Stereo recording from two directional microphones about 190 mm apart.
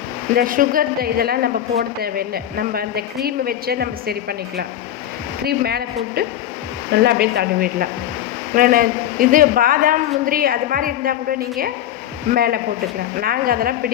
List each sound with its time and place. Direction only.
0.3 s a woman's voice: 45° right (ahead or behind)